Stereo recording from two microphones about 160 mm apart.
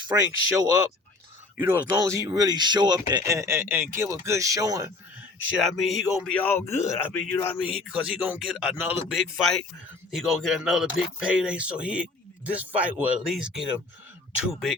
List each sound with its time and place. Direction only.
0.1 s speech: 25° right (ahead or behind)
1.5 s speech: 10° right (ahead or behind)
1.9 s speech: 20° right (ahead or behind)
5.5 s speech: centre (ahead or behind)
6.4 s speech: 15° left (ahead or behind)
7.6 s speech: 5° right (ahead or behind)